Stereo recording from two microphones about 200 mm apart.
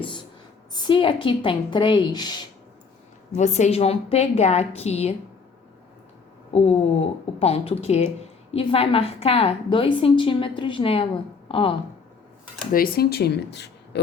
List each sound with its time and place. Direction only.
0.7 s a woman's voice: 20° left (ahead or behind)
3.3 s a woman's voice: 35° left (ahead or behind)
6.5 s a woman's voice: 30° left (ahead or behind)
12.7 s speech: 45° left (ahead or behind)